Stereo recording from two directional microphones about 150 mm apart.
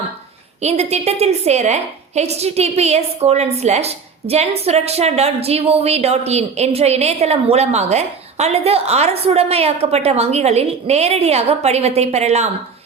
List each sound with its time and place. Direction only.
0.6 s a woman's voice: 45° right (ahead or behind)